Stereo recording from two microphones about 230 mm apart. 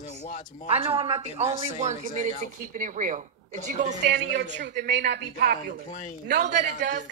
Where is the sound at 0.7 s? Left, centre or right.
Right.